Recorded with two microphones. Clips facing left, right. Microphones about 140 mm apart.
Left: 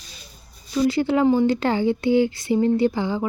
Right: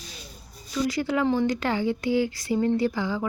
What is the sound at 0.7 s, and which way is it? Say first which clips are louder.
Speech: left 6 dB; 30° left (ahead or behind).